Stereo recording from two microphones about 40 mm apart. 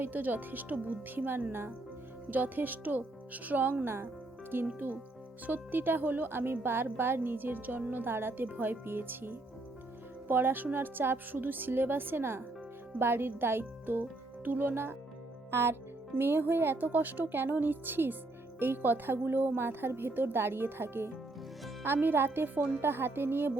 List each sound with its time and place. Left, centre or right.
0.0 s speech: right
2.3 s speech: right
3.8 s speech: right
4.5 s a woman's voice: right
8.1 s a woman's voice: right
14.0 s speech: right
15.4 s speech: right
16.9 s a woman's voice: right
21.8 s a woman's voice: right